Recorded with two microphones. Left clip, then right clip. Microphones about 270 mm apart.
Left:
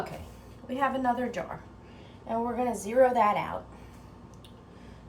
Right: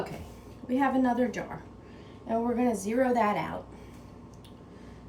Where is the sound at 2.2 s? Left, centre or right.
Centre.